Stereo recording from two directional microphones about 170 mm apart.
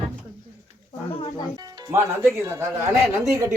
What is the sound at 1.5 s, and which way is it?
Speech, 20° right (ahead or behind).